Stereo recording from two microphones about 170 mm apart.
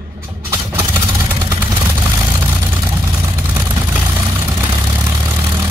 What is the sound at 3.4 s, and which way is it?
Vehicle, 10° right (ahead or behind).